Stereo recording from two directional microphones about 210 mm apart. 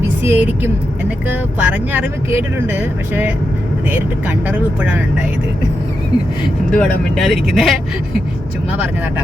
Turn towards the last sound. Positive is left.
turn(degrees=0)  # may be behind; listen again after turning